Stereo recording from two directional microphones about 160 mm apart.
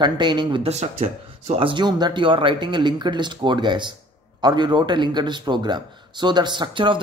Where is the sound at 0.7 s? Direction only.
45° right (ahead or behind).